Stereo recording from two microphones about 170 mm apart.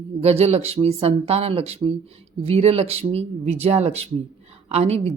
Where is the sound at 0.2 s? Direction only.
35° right (ahead or behind).